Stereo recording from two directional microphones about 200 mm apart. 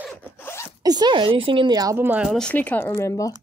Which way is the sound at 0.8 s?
20° right (ahead or behind).